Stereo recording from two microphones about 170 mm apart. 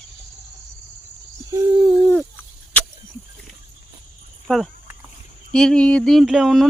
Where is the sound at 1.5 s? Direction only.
15° right (ahead or behind).